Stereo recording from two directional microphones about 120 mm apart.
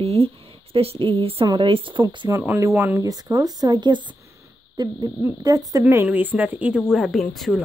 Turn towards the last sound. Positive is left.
turn(degrees=0)  # may be behind; listen again after turning